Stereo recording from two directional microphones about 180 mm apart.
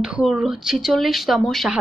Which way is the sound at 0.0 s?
5° right (ahead or behind).